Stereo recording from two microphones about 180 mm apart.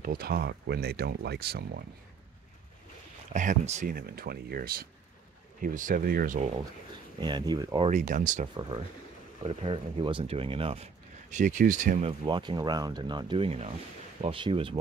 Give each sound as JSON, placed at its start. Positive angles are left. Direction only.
{"t": 0.0, "sound": "speech", "side_deg": -55}
{"t": 3.3, "sound": "speech", "side_deg": -40}
{"t": 3.9, "sound": "speech", "side_deg": -55}
{"t": 7.2, "sound": "speech", "side_deg": -25}
{"t": 7.9, "sound": "speech", "side_deg": -45}
{"t": 8.5, "sound": "speech", "side_deg": -25}
{"t": 12.0, "sound": "speech", "side_deg": -30}